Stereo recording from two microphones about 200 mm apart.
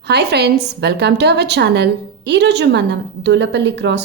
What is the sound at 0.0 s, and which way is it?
Speech, 55° right (ahead or behind).